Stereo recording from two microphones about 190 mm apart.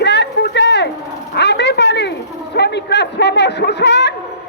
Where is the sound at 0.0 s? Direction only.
65° left (ahead or behind).